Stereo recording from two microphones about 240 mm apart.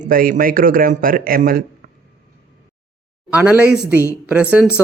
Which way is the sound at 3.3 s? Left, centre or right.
Centre.